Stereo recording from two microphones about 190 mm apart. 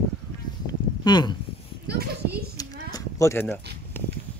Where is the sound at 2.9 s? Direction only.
15° left (ahead or behind).